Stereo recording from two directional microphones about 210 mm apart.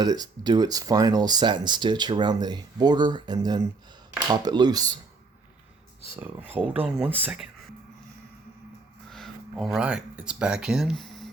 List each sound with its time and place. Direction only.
0.0 s speech: 20° right (ahead or behind)
6.7 s speech: 10° right (ahead or behind)
9.0 s speech: centre (ahead or behind)